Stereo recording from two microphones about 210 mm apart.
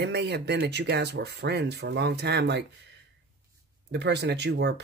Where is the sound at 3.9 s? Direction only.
55° right (ahead or behind).